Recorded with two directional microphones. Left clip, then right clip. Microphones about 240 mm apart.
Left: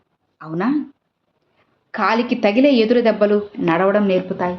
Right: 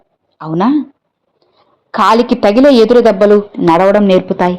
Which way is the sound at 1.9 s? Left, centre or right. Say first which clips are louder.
Right 9 dB; right.